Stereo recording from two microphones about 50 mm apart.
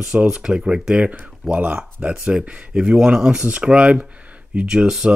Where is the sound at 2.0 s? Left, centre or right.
Centre.